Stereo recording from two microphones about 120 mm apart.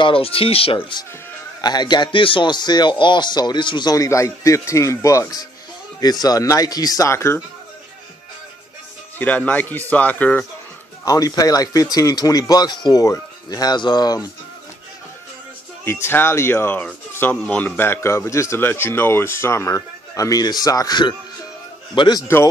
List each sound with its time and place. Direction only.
0.0 s speech: 50° left (ahead or behind); by 7.4 s 20° left (ahead or behind)
9.2 s a man's voice: 10° left (ahead or behind)
11.1 s speech: 30° left (ahead or behind)
15.8 s speech: 20° left (ahead or behind); by 22.2 s 40° left (ahead or behind)